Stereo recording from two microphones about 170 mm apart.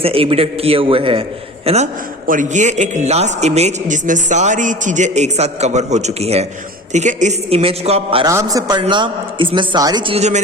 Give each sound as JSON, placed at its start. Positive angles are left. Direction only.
{"t": 0.0, "sound": "a woman's voice", "side_deg": -35}
{"t": 2.2, "sound": "a man's voice", "side_deg": -50}
{"t": 8.3, "sound": "a man's voice", "side_deg": -20}